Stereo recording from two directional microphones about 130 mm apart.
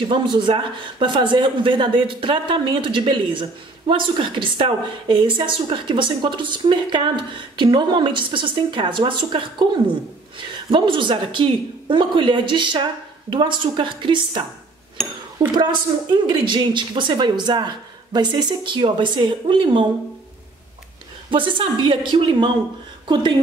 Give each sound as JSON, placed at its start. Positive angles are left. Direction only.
{"t": 0.1, "sound": "speech", "side_deg": -35}
{"t": 10.7, "sound": "speech", "side_deg": -40}
{"t": 15.0, "sound": "speech", "side_deg": 0}
{"t": 15.5, "sound": "speech", "side_deg": -35}
{"t": 21.3, "sound": "speech", "side_deg": -40}